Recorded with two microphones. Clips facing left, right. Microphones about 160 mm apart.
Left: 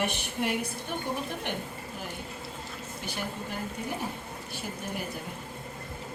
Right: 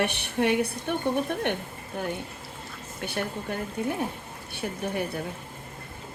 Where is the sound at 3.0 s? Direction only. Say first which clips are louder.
Right 6 dB; 60° right (ahead or behind).